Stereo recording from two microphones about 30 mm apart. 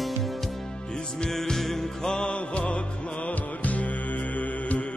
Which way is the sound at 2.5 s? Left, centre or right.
Left.